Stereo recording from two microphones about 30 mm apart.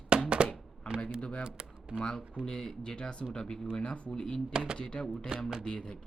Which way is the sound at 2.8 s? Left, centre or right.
Left.